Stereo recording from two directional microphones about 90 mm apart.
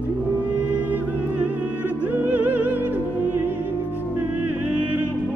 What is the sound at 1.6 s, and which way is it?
Music, 15° right (ahead or behind).